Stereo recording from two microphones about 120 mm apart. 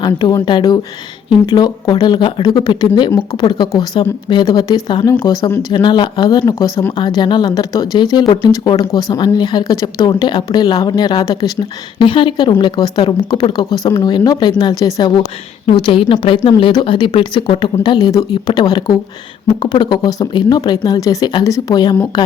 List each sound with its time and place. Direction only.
0.0 s speech: 35° left (ahead or behind)
5.2 s speech: 30° left (ahead or behind)
6.9 s speech: 40° left (ahead or behind)
11.9 s speech: 45° left (ahead or behind)
15.7 s speech: 45° left (ahead or behind)